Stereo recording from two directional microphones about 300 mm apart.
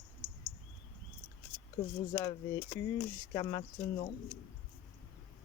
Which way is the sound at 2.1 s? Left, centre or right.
Centre.